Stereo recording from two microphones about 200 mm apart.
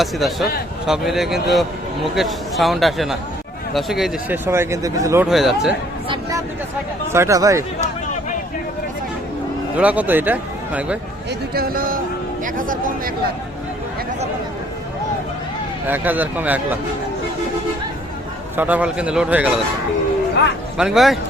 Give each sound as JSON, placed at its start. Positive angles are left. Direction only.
{"t": 0.0, "sound": "speech", "side_deg": 0}
{"t": 4.4, "sound": "speech", "side_deg": -10}
{"t": 5.3, "sound": "speech", "side_deg": 0}
{"t": 7.1, "sound": "speech", "side_deg": -15}
{"t": 9.7, "sound": "speech", "side_deg": -5}
{"t": 11.3, "sound": "speech", "side_deg": -50}
{"t": 15.9, "sound": "speech", "side_deg": -10}
{"t": 18.5, "sound": "speech", "side_deg": -10}
{"t": 20.7, "sound": "speech", "side_deg": 0}